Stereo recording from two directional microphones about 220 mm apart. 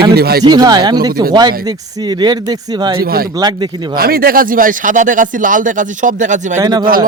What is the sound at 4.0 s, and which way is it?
A man's voice, 45° right (ahead or behind).